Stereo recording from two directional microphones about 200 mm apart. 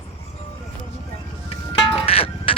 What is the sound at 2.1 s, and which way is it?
Music, 30° left (ahead or behind).